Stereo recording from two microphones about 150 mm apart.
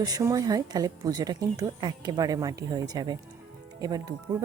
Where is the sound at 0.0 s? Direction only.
25° right (ahead or behind).